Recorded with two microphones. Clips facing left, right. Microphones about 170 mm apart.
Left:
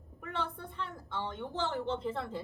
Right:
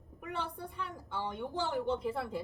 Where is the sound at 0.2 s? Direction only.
10° right (ahead or behind).